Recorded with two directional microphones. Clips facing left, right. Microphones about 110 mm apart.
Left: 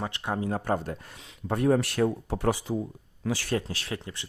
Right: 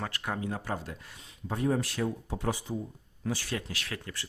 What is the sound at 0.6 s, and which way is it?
Speech, 50° left (ahead or behind).